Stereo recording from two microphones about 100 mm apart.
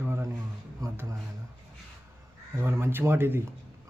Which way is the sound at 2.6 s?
25° right (ahead or behind).